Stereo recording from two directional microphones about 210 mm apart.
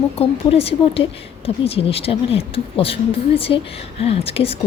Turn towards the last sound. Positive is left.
turn(degrees=25)  # may be behind; listen again after turning